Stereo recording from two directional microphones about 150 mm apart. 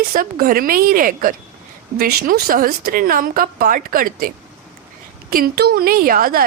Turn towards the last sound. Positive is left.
turn(degrees=-75)  # may be behind; listen again after turning